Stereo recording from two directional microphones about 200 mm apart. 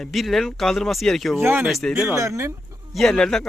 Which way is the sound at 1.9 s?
15° right (ahead or behind).